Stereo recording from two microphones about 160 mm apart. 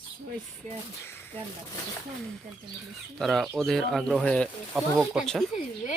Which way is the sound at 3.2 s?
Centre (ahead or behind).